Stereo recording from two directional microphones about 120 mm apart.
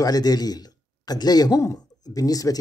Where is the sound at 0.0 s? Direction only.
30° left (ahead or behind).